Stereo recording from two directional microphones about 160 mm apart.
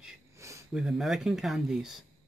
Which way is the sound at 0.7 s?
Centre (ahead or behind).